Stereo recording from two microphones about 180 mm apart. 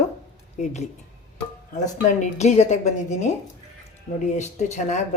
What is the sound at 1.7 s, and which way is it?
A woman's voice, 45° left (ahead or behind).